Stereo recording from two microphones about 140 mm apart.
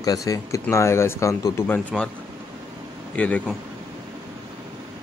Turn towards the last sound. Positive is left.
turn(degrees=10)  # may be behind; listen again after turning